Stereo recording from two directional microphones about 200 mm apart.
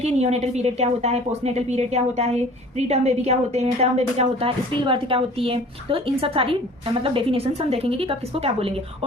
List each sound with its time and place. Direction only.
0.0 s a woman's voice: 35° right (ahead or behind)